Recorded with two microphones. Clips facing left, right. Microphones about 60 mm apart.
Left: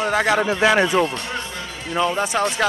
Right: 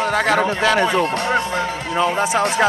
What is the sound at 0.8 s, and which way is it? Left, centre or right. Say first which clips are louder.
Speech: right 2 dB; right.